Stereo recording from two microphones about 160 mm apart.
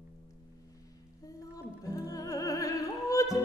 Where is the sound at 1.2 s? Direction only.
20° left (ahead or behind).